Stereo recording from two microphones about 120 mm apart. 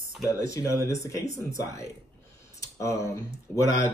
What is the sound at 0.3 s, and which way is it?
Speech, 25° left (ahead or behind).